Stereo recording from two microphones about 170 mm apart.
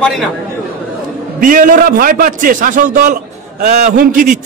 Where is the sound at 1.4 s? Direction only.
55° right (ahead or behind).